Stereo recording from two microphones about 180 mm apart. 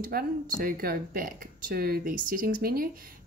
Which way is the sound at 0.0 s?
55° right (ahead or behind).